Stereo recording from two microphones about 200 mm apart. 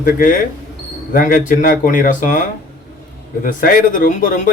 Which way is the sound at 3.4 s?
45° left (ahead or behind).